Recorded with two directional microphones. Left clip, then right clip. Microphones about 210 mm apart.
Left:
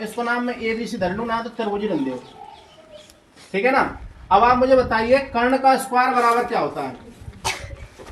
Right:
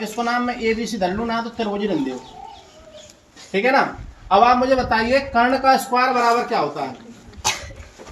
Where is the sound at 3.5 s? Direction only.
5° left (ahead or behind).